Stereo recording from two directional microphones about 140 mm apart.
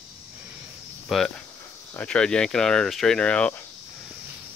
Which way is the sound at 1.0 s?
Centre (ahead or behind).